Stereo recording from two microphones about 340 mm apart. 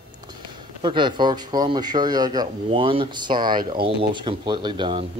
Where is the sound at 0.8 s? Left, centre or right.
Centre.